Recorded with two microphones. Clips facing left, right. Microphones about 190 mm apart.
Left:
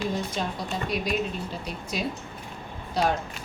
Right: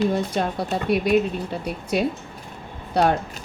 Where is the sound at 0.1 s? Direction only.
60° right (ahead or behind).